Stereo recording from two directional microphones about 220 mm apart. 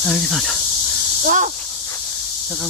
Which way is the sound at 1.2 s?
35° right (ahead or behind).